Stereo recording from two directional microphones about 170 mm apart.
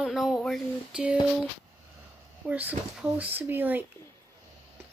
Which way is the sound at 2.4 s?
10° right (ahead or behind).